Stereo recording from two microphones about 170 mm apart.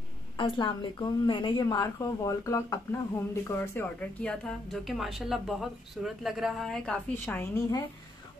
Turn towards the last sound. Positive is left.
turn(degrees=10)  # may be behind; listen again after turning